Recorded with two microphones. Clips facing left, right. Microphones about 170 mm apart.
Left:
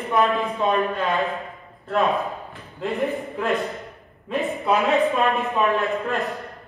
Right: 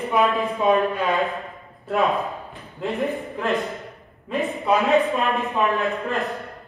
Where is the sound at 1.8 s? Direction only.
Centre (ahead or behind).